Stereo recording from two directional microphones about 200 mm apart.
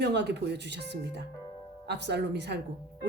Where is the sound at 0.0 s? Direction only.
60° right (ahead or behind).